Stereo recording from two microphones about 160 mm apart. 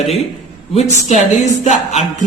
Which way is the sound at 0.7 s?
45° left (ahead or behind).